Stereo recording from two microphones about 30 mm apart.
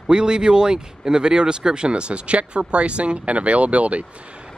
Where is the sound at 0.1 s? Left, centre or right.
Right.